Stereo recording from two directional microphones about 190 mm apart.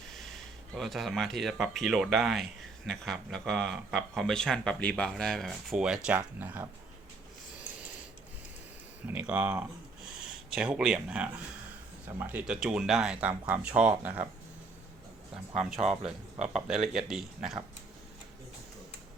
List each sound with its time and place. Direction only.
0.7 s speech: centre (ahead or behind)
9.0 s speech: 10° right (ahead or behind)
16.4 s speech: 35° right (ahead or behind)
16.6 s speech: centre (ahead or behind)